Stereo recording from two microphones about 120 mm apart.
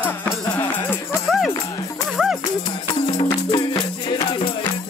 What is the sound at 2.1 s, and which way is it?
Music, 5° right (ahead or behind).